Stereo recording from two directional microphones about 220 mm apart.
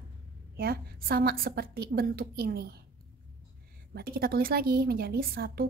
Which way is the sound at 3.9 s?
45° right (ahead or behind).